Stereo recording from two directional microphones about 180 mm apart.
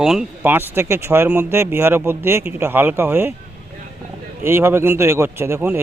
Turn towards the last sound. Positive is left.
turn(degrees=-10)  # may be behind; listen again after turning